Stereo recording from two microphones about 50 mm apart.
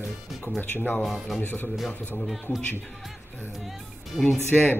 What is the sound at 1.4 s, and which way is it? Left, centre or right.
Speech, left.